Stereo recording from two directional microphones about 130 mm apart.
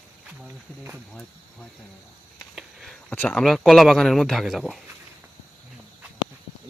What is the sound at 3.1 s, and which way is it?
Speech, 5° left (ahead or behind).